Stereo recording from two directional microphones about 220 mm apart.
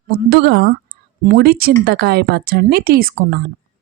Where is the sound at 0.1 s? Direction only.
45° right (ahead or behind).